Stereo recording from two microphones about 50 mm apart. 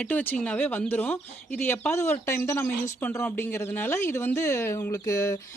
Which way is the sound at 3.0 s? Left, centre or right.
Left.